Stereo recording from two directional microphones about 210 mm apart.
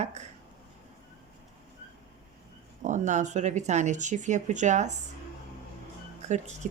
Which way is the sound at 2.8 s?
35° right (ahead or behind).